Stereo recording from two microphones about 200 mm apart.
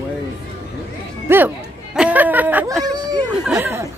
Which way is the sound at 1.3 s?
10° right (ahead or behind).